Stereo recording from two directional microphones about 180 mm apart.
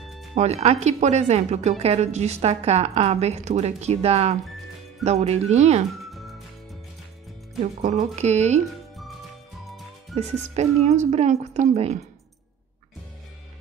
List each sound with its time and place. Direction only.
0.0 s music: centre (ahead or behind)
0.3 s speech: 35° right (ahead or behind)
6.1 s music: centre (ahead or behind)
7.6 s speech: 40° right (ahead or behind)
10.1 s speech: 35° right (ahead or behind)